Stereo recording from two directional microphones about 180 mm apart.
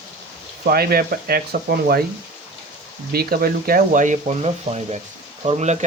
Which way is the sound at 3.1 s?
60° right (ahead or behind).